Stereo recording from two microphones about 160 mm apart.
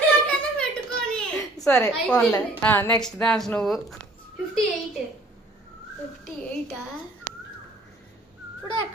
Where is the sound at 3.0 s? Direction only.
5° left (ahead or behind).